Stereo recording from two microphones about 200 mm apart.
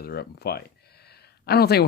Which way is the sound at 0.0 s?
50° left (ahead or behind).